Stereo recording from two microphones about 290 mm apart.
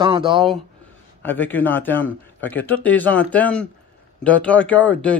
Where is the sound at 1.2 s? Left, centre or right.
Centre.